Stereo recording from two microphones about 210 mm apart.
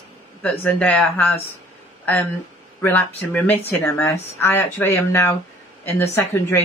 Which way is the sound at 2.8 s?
10° left (ahead or behind).